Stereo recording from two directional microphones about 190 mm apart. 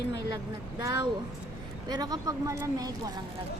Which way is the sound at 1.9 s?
20° right (ahead or behind).